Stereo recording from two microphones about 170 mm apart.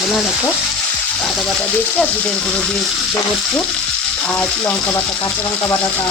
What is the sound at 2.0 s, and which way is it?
Speech, 5° left (ahead or behind).